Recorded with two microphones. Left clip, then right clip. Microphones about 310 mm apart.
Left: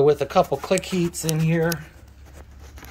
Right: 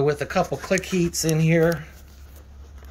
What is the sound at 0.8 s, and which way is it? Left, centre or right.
Speech, left.